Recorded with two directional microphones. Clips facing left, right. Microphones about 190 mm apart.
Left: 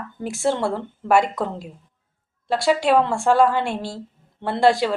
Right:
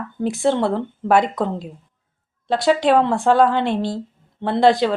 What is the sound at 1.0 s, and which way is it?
Speech, 10° left (ahead or behind).